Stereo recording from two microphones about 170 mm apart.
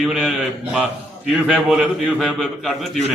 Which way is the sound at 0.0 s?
Centre (ahead or behind).